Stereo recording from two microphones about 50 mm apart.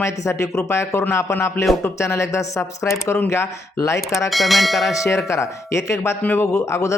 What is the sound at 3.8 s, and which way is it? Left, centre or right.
Speech, left.